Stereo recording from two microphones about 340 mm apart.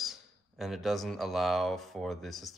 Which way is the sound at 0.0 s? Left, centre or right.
Centre.